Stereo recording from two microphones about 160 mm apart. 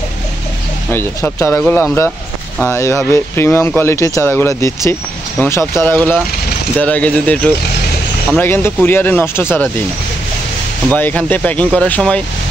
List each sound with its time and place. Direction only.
0.9 s speech: 15° left (ahead or behind)
10.9 s speech: 10° left (ahead or behind)